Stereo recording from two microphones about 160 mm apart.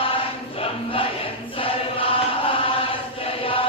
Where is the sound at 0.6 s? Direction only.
35° left (ahead or behind).